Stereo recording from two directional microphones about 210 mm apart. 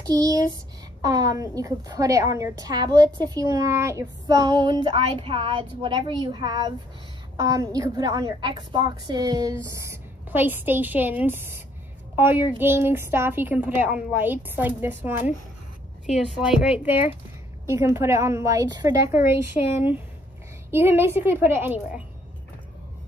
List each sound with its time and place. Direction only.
0.0 s a woman's voice: 15° right (ahead or behind)